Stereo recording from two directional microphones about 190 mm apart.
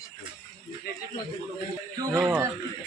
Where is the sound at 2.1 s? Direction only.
10° right (ahead or behind).